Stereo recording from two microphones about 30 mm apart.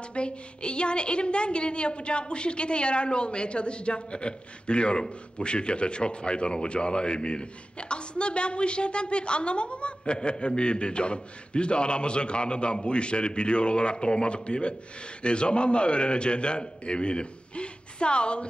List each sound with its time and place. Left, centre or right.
0.1 s speech: left